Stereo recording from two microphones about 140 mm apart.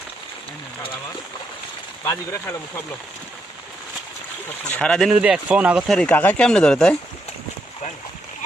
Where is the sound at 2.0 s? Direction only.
15° left (ahead or behind).